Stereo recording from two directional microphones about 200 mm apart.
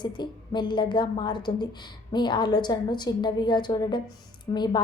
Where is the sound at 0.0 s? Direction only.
25° left (ahead or behind).